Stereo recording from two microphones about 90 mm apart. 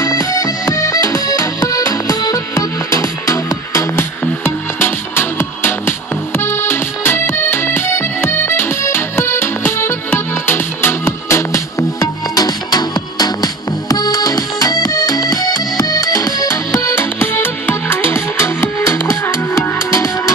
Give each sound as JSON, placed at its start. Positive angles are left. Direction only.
{"t": 0.0, "sound": "music", "side_deg": 40}
{"t": 4.7, "sound": "music", "side_deg": 25}
{"t": 12.4, "sound": "music", "side_deg": 50}